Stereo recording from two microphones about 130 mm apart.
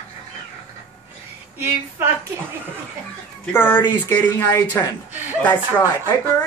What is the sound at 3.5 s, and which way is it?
Speech, 15° left (ahead or behind).